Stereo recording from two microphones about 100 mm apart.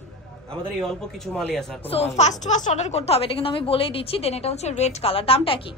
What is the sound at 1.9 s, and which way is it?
Speech, 80° left.